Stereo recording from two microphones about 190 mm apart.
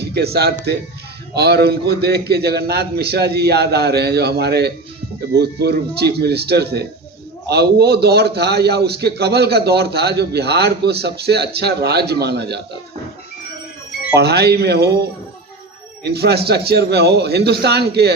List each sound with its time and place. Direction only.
0.0 s a man's voice: 60° right (ahead or behind)
14.2 s a man's voice: 60° right (ahead or behind)